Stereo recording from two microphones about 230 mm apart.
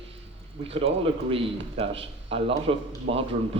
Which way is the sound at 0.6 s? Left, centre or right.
Right.